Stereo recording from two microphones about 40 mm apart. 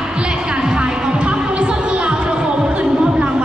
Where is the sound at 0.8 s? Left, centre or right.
Right.